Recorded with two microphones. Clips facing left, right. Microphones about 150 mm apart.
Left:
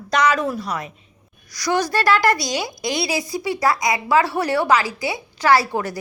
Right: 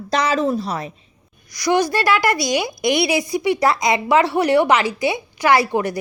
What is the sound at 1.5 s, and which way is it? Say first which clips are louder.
A woman's voice: right 3 dB; 15° right (ahead or behind).